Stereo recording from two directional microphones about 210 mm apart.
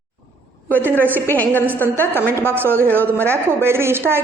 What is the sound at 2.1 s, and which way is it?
A woman's voice, 10° right (ahead or behind).